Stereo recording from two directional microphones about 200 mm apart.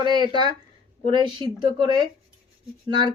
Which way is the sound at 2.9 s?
20° right (ahead or behind).